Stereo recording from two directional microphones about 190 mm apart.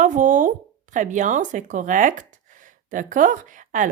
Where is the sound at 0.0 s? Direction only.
45° right (ahead or behind).